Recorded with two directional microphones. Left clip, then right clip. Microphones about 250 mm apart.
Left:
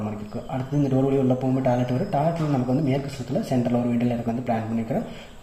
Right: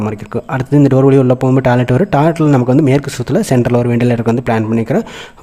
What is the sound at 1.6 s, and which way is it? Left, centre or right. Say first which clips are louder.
Speech: right 11 dB; right.